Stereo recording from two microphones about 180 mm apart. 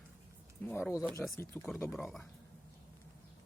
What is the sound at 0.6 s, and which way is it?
Speech, 10° left (ahead or behind).